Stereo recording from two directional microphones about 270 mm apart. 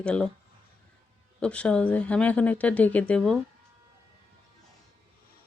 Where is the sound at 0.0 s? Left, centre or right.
Centre.